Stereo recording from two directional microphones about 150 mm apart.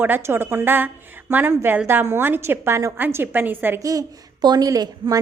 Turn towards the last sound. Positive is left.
turn(degrees=-25)  # may be behind; listen again after turning